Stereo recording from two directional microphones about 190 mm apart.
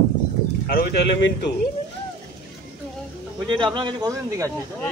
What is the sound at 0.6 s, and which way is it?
Speech, 55° left (ahead or behind).